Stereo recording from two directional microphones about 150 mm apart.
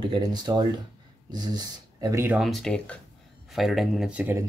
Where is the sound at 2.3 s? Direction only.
Centre (ahead or behind).